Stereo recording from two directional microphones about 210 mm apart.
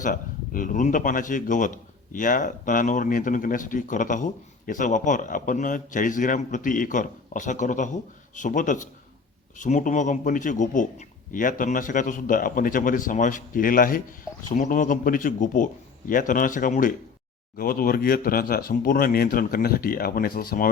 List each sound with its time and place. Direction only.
0.0 s speech: 40° left (ahead or behind)